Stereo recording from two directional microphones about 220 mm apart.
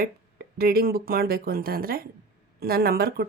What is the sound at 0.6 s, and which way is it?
A woman's voice, 45° right (ahead or behind).